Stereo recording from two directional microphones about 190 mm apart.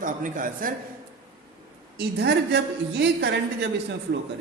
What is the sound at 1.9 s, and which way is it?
A man's voice, 60° right (ahead or behind).